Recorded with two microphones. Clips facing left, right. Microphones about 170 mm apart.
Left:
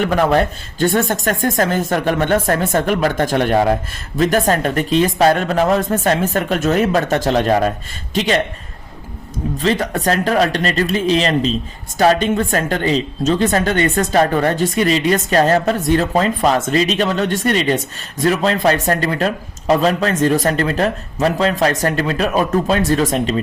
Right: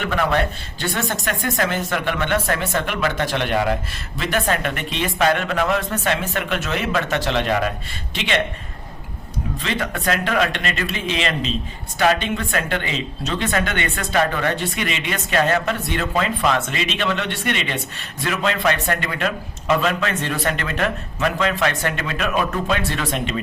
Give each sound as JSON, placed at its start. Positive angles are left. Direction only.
{"t": 0.0, "sound": "speech", "side_deg": 40}
{"t": 9.6, "sound": "speech", "side_deg": 40}